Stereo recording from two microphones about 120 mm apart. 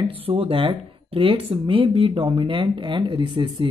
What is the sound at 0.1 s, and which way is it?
Speech, 50° right (ahead or behind).